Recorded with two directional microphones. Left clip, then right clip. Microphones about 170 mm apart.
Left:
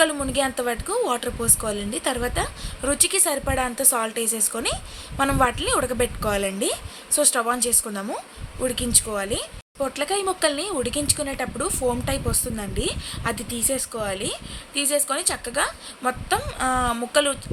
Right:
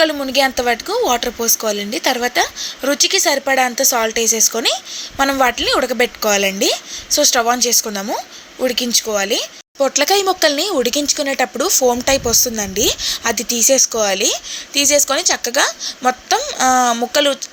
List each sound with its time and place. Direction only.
0.0 s a woman's voice: 20° right (ahead or behind)